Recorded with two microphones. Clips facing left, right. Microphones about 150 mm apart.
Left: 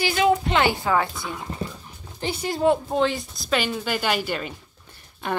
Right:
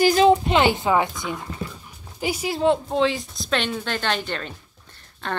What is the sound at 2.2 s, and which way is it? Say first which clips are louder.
Speech: right 2 dB; 10° right (ahead or behind).